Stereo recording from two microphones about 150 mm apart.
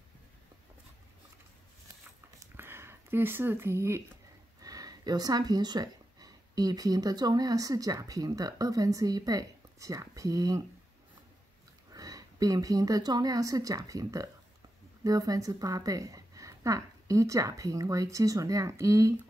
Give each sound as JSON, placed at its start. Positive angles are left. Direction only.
{"t": 2.5, "sound": "a sound", "side_deg": -15}
{"t": 4.6, "sound": "speech", "side_deg": -25}
{"t": 11.9, "sound": "a woman's voice", "side_deg": -25}